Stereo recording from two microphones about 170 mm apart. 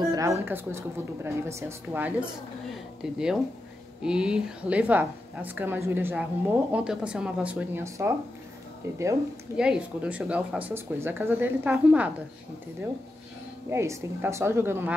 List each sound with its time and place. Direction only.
0.1 s speech: 15° right (ahead or behind)
9.6 s speech: 5° right (ahead or behind)
13.7 s speech: 15° right (ahead or behind)